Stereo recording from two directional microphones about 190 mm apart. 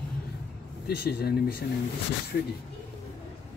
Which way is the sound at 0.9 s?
55° left (ahead or behind).